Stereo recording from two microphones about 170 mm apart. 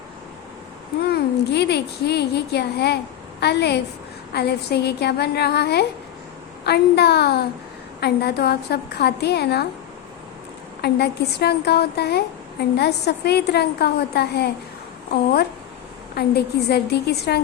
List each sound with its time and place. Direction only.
1.5 s a woman's voice: 80° left
10.8 s a woman's voice: 70° left (ahead or behind)